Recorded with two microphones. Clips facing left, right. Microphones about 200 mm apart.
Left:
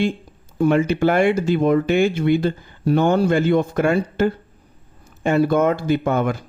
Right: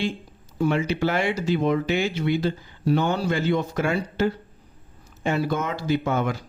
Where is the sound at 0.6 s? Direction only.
50° left (ahead or behind).